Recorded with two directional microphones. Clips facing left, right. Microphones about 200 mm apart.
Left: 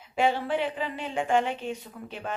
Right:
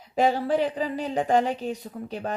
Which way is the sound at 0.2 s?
40° right (ahead or behind).